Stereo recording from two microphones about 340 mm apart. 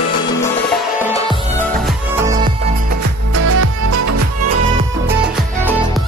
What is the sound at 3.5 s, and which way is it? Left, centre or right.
Music, right.